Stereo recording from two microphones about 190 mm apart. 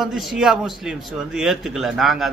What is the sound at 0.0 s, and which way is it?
A man's voice, centre (ahead or behind).